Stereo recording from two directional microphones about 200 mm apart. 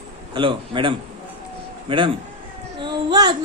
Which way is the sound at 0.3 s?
25° right (ahead or behind).